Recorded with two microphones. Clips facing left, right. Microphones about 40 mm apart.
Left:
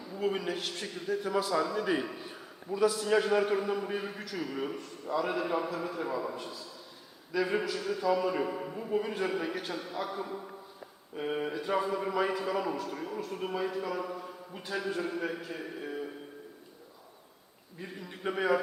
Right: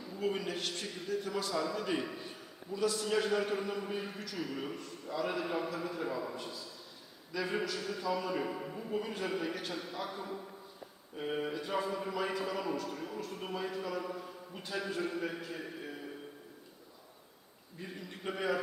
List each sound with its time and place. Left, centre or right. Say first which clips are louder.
0.0 s a man's voice: left 3 dB; centre
17.7 s a man's voice: left 2 dB; centre